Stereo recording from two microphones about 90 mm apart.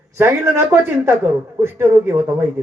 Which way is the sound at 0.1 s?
30° right (ahead or behind).